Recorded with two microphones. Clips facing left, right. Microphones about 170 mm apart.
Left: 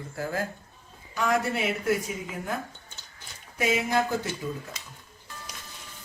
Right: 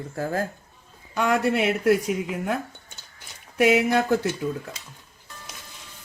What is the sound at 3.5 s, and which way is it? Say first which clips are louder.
Speech: right 7 dB; 75° right (ahead or behind).